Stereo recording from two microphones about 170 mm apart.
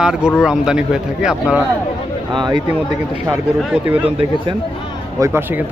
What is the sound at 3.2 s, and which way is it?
Speech, 10° right (ahead or behind).